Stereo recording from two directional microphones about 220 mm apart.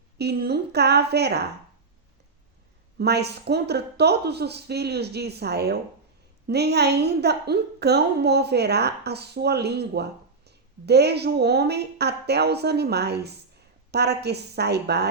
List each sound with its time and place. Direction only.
0.2 s a woman's voice: 45° right (ahead or behind)
3.0 s a woman's voice: 50° right (ahead or behind)